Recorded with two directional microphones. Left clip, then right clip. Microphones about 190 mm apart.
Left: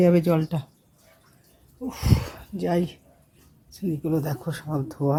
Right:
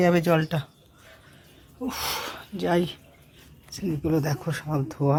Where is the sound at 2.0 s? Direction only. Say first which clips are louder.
Right 1 dB; 15° left (ahead or behind).